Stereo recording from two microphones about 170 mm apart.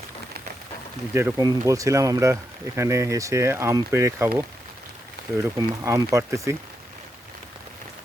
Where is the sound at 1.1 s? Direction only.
20° right (ahead or behind).